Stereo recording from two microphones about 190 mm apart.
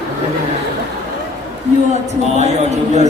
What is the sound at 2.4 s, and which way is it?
Speech, 35° right (ahead or behind).